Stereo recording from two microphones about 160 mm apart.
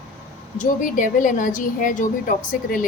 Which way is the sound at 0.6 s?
55° left (ahead or behind).